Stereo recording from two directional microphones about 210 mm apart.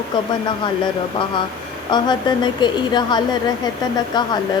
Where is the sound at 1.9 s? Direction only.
20° left (ahead or behind).